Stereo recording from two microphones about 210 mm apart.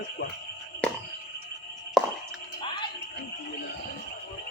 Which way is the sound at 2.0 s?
Centre (ahead or behind).